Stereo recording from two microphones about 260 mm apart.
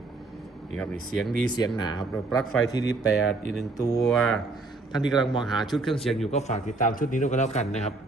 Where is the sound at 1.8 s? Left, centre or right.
Centre.